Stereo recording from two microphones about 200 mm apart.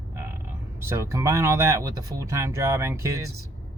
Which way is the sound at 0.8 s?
15° right (ahead or behind).